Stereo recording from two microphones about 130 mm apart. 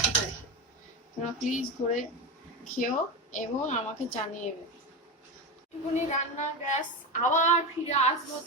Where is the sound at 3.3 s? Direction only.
70° left (ahead or behind).